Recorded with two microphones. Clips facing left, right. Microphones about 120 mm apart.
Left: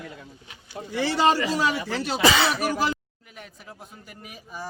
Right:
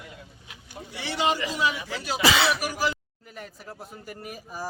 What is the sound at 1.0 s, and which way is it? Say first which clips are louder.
Speech: left 5 dB; 40° left (ahead or behind).